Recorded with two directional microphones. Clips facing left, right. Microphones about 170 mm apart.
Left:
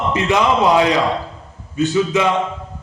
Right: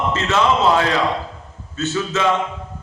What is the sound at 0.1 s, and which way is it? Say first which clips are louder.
A man's voice: left 3 dB; 15° left (ahead or behind).